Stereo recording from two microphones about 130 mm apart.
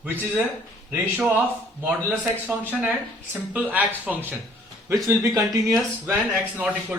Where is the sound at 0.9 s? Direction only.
10° right (ahead or behind).